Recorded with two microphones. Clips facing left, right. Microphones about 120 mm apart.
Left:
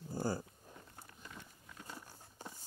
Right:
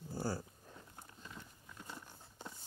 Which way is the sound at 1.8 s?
10° left (ahead or behind).